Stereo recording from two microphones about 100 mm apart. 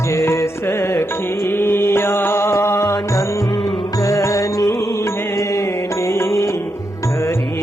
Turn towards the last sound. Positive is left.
turn(degrees=30)  # may be behind; listen again after turning